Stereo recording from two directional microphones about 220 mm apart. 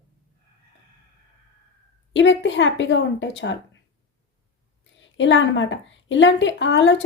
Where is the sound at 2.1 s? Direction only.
55° left (ahead or behind).